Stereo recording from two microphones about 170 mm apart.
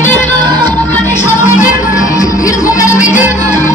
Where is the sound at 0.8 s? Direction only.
45° left (ahead or behind).